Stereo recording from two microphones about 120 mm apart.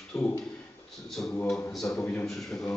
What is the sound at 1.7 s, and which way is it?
Speech, 5° left (ahead or behind).